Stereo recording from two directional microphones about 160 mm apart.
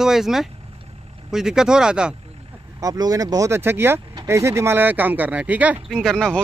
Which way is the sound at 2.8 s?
25° right (ahead or behind).